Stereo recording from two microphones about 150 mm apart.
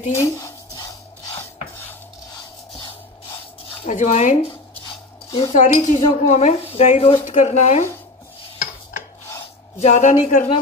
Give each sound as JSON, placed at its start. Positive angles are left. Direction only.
{"t": 0.1, "sound": "a sound", "side_deg": 20}
{"t": 2.3, "sound": "music", "side_deg": 35}
{"t": 3.8, "sound": "cutlery", "side_deg": 50}
{"t": 4.5, "sound": "dishes", "side_deg": 30}
{"t": 5.5, "sound": "cutlery", "side_deg": 55}
{"t": 6.7, "sound": "speech", "side_deg": 45}
{"t": 7.2, "sound": "cutlery", "side_deg": 50}
{"t": 9.8, "sound": "cutlery", "side_deg": 50}